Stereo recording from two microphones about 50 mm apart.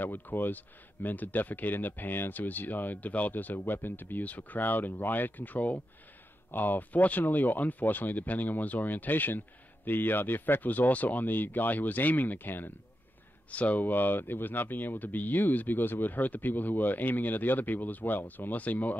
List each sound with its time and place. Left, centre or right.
0.0 s speech: left
13.5 s speech: left